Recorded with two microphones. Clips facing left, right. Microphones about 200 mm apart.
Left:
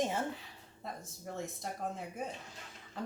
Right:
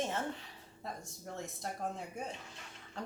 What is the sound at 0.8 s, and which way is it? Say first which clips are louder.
Speech: left 1 dB; centre (ahead or behind).